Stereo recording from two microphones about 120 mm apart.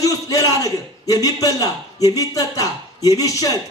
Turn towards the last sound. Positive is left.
turn(degrees=30)  # may be behind; listen again after turning